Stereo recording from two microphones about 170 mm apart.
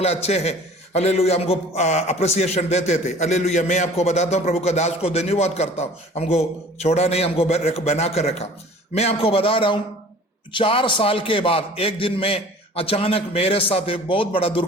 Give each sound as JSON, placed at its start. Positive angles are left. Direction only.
{"t": 0.0, "sound": "a man's voice", "side_deg": 40}